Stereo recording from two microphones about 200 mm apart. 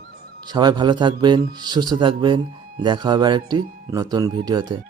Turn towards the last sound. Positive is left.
turn(degrees=-20)  # may be behind; listen again after turning